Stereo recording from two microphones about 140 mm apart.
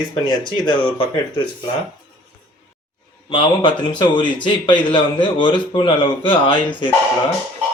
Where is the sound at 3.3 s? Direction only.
35° left (ahead or behind).